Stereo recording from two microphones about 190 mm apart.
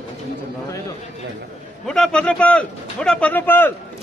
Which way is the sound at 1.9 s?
5° left (ahead or behind).